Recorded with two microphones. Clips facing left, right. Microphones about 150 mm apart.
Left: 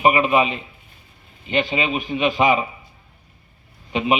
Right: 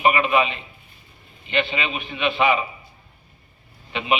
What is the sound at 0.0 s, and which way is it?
Speech, 35° left (ahead or behind).